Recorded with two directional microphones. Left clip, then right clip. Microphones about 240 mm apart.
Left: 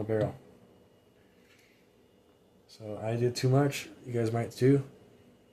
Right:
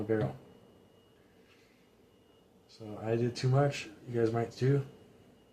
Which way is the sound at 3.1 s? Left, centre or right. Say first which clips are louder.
Left 3 dB; left.